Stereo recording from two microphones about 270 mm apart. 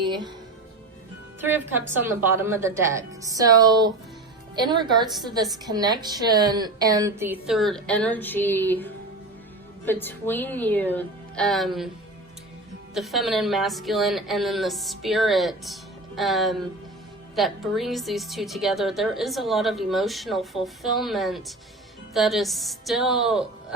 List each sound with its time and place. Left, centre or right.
0.0 s music: centre
1.4 s a woman's voice: centre
12.9 s a woman's voice: centre